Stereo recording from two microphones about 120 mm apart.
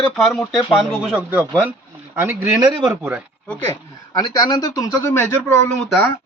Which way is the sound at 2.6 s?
35° right (ahead or behind).